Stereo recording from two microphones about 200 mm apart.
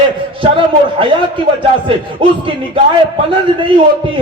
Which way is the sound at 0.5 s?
25° right (ahead or behind).